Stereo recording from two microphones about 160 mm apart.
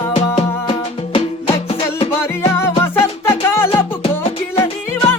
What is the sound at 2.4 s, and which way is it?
Music, 15° left (ahead or behind).